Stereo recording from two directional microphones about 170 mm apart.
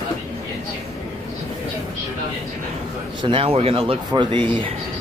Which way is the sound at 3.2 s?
35° right (ahead or behind).